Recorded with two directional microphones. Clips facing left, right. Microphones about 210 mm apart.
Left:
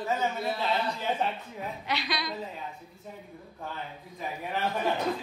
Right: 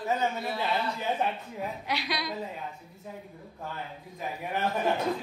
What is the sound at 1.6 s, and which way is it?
Speech, 10° right (ahead or behind).